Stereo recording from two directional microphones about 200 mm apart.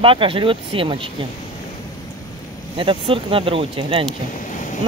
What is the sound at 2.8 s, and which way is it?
Speech, 25° right (ahead or behind).